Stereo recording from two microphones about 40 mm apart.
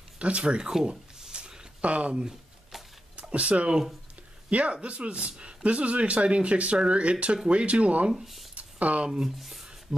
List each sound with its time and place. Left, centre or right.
0.2 s speech: right
1.3 s a sound: centre
1.8 s speech: right
3.2 s speech: right
8.1 s speech: centre
8.5 s speech: right
9.4 s speech: centre